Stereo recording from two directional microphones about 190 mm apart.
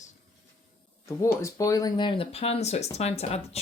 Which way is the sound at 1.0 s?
15° left (ahead or behind).